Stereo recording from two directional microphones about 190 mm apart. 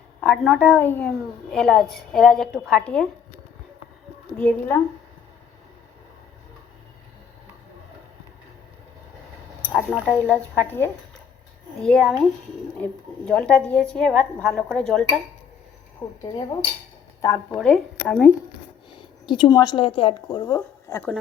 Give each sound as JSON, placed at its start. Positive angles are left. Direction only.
{"t": 0.2, "sound": "a woman's voice", "side_deg": 5}
{"t": 4.4, "sound": "a woman's voice", "side_deg": 10}
{"t": 9.7, "sound": "a woman's voice", "side_deg": 0}
{"t": 16.0, "sound": "a woman's voice", "side_deg": 15}
{"t": 17.6, "sound": "a woman's voice", "side_deg": 5}
{"t": 19.2, "sound": "a woman's voice", "side_deg": 25}